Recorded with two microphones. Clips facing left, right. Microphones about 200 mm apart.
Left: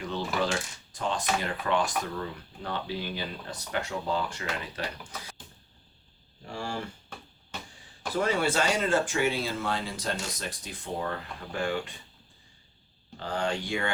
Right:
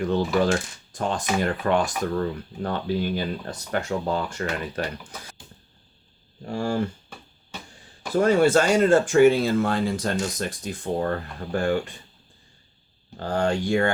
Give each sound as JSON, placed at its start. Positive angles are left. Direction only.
{"t": 0.0, "sound": "speech", "side_deg": -50}
{"t": 6.4, "sound": "speech", "side_deg": -45}
{"t": 8.1, "sound": "speech", "side_deg": -45}
{"t": 13.1, "sound": "speech", "side_deg": -45}